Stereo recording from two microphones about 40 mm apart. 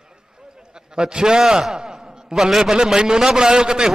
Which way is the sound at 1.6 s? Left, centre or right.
Centre.